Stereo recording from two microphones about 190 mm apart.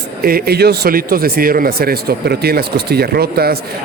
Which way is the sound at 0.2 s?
50° right (ahead or behind).